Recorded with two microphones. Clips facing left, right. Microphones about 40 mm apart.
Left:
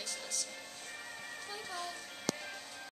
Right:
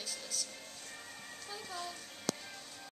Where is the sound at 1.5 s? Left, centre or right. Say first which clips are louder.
Even; centre.